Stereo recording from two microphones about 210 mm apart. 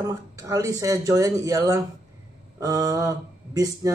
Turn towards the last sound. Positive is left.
turn(degrees=-15)  # may be behind; listen again after turning